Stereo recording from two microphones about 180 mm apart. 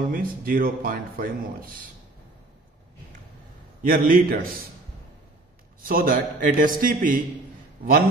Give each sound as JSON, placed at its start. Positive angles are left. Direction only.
{"t": 0.0, "sound": "speech", "side_deg": -55}
{"t": 3.8, "sound": "speech", "side_deg": -50}
{"t": 5.8, "sound": "speech", "side_deg": -55}